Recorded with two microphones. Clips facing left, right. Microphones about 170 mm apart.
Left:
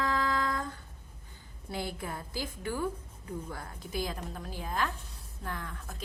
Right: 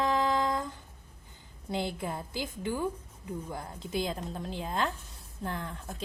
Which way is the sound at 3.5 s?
25° right (ahead or behind).